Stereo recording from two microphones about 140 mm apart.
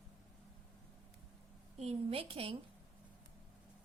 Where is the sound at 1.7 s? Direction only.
45° right (ahead or behind).